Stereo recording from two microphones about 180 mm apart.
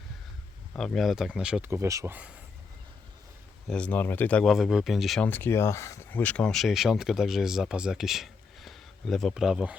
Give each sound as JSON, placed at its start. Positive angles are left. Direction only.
{"t": 0.7, "sound": "speech", "side_deg": 5}
{"t": 1.7, "sound": "speech", "side_deg": -15}
{"t": 3.7, "sound": "speech", "side_deg": 5}